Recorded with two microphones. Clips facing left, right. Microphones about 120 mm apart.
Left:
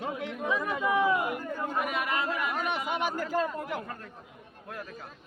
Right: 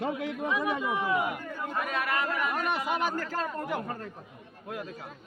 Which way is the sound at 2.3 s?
Centre (ahead or behind).